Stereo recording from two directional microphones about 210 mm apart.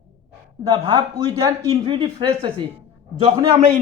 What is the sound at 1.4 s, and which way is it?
A man's voice, 20° right (ahead or behind).